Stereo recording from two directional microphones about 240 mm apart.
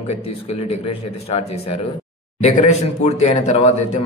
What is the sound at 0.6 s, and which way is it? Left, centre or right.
Speech, left.